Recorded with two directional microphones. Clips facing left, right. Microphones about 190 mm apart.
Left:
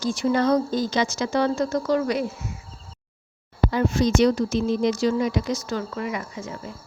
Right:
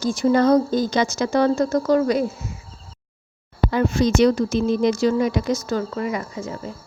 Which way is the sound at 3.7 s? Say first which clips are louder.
Right 2 dB; 60° right (ahead or behind).